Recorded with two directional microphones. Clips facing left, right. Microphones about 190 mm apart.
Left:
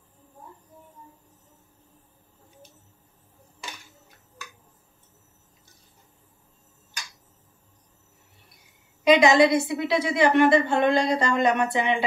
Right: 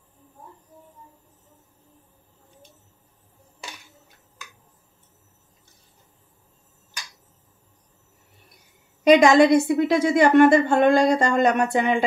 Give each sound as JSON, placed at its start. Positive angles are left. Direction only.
{"t": 9.0, "sound": "a woman's voice", "side_deg": -50}